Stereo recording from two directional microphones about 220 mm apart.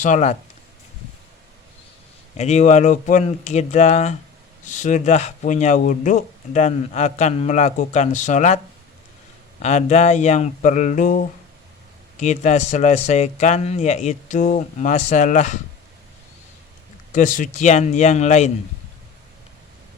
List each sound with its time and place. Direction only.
0.0 s speech: 35° left (ahead or behind)
2.3 s speech: 30° left (ahead or behind)
17.2 s speech: 35° left (ahead or behind)